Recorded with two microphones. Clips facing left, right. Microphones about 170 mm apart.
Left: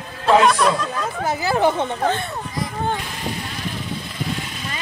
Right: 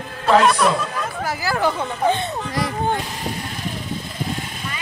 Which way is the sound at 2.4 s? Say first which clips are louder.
Right 4 dB; 75° right (ahead or behind).